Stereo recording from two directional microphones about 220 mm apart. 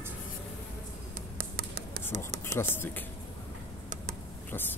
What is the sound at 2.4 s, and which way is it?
Speech, 10° left (ahead or behind).